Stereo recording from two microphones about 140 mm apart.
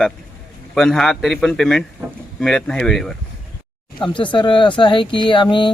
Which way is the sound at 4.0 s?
35° left (ahead or behind).